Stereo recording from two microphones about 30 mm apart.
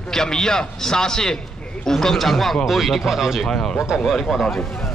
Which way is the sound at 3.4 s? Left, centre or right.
Left.